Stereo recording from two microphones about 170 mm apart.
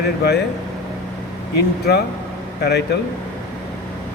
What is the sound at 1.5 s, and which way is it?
Speech, 75° left (ahead or behind).